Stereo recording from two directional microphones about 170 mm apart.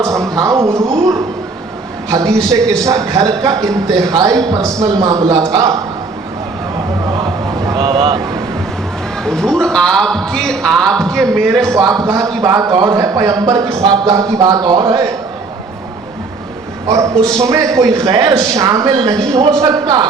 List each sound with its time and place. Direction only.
0.0 s a sound: 20° right (ahead or behind)
2.0 s a man's voice: 20° right (ahead or behind)
7.6 s a sound: 25° right (ahead or behind)
9.2 s a man's voice: 5° left (ahead or behind)
11.7 s a man's voice: 20° right (ahead or behind)
16.9 s a man's voice: 20° right (ahead or behind)